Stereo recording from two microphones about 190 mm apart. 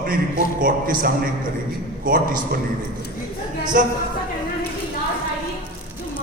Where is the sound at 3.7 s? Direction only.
45° right (ahead or behind).